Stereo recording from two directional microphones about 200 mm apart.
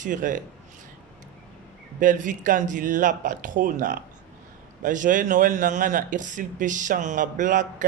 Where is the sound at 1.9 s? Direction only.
40° right (ahead or behind).